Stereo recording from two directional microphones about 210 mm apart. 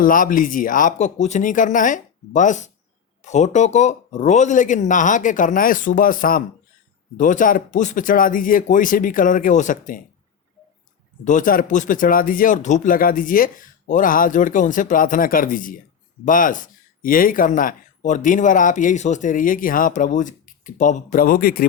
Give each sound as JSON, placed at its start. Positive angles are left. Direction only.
{"t": 0.0, "sound": "speech", "side_deg": 40}
{"t": 11.3, "sound": "speech", "side_deg": 40}